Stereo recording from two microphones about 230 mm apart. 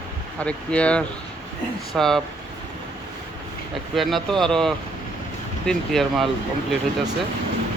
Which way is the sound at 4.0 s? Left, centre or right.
Centre.